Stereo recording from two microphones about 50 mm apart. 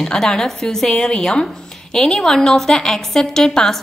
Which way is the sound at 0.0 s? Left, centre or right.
Centre.